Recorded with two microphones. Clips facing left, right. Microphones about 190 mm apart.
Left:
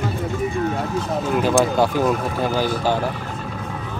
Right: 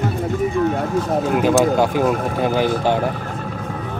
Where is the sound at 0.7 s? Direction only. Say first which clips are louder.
Right 4 dB; 50° right (ahead or behind).